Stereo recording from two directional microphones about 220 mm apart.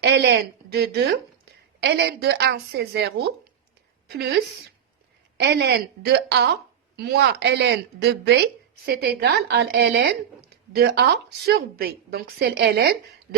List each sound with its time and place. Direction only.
0.0 s speech: 50° right (ahead or behind)
5.4 s speech: 50° right (ahead or behind)